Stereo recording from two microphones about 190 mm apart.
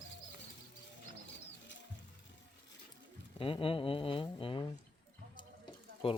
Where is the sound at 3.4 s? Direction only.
30° left (ahead or behind).